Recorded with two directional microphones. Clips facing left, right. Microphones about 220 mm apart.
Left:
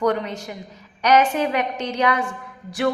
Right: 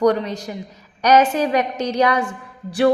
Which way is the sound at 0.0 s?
35° right (ahead or behind).